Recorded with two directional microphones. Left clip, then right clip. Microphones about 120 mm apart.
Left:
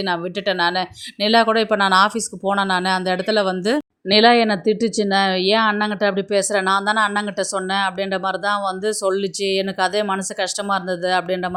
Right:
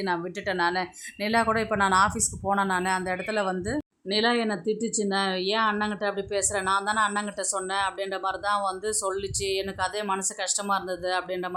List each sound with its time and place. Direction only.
0.0 s speech: 30° left (ahead or behind)
4.1 s speech: 50° left (ahead or behind)